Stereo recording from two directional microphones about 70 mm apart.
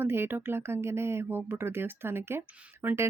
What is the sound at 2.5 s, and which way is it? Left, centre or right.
Speech, centre.